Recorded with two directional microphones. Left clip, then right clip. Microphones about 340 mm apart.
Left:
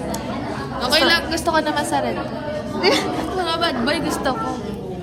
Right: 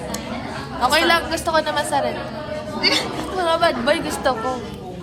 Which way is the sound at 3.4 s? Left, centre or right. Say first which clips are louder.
Right 4 dB; centre.